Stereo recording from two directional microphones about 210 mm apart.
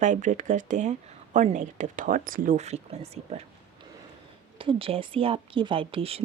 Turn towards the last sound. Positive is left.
turn(degrees=-25)  # may be behind; listen again after turning